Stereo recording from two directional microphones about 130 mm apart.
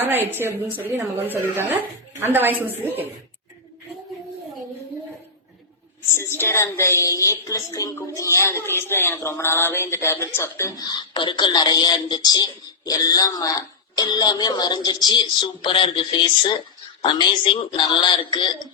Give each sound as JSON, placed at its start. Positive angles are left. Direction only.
{"t": 0.1, "sound": "a woman's voice", "side_deg": -15}
{"t": 6.3, "sound": "a sound", "side_deg": 20}
{"t": 17.0, "sound": "a man's voice", "side_deg": 40}